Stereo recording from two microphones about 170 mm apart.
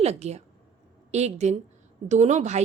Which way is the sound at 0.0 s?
40° right (ahead or behind).